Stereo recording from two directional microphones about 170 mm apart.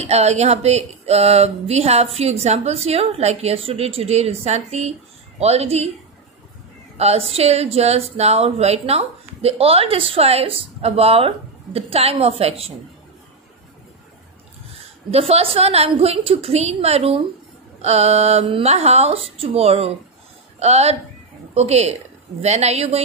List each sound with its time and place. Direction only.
0.0 s speech: 40° right (ahead or behind)
7.0 s speech: 35° right (ahead or behind)
15.0 s a woman's voice: 35° right (ahead or behind)